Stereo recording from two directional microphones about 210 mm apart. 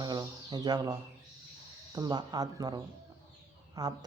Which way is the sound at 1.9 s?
20° right (ahead or behind).